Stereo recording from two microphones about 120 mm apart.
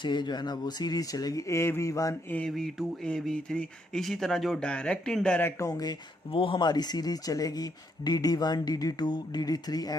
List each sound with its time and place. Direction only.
0.0 s speech: 40° left (ahead or behind)
2.5 s speech: centre (ahead or behind); by 6.0 s 35° left (ahead or behind)
6.3 s speech: 45° left (ahead or behind)